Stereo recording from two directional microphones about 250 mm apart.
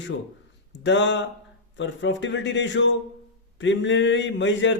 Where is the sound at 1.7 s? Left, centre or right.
Left.